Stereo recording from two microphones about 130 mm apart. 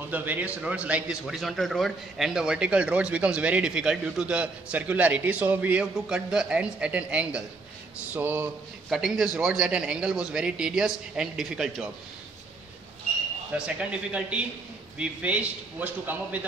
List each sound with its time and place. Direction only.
0.1 s a man's voice: 15° right (ahead or behind)
8.9 s a man's voice: 5° right (ahead or behind)
13.7 s a man's voice: 10° right (ahead or behind)